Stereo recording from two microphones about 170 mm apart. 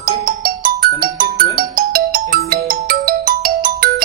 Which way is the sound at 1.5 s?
60° right (ahead or behind).